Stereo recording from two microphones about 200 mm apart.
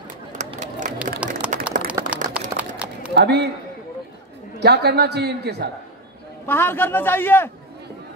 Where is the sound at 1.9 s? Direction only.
5° right (ahead or behind).